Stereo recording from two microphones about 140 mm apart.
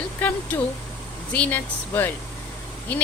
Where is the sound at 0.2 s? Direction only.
10° left (ahead or behind).